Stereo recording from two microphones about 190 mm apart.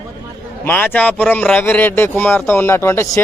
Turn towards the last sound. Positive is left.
turn(degrees=15)  # may be behind; listen again after turning